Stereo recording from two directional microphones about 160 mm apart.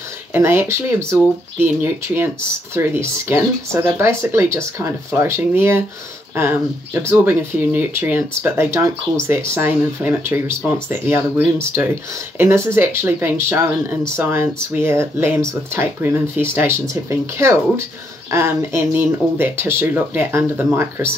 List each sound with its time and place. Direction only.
0.3 s speech: 15° right (ahead or behind)